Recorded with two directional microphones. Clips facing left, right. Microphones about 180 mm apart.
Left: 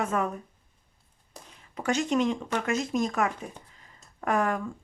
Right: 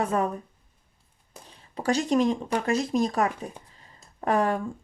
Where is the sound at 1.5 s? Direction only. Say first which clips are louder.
Right 2 dB; 35° right (ahead or behind).